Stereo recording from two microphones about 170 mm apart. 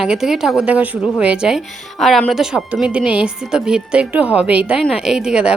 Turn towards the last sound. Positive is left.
turn(degrees=-5)  # may be behind; listen again after turning